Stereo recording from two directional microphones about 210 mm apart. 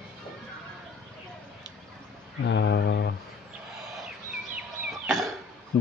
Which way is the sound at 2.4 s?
55° left (ahead or behind).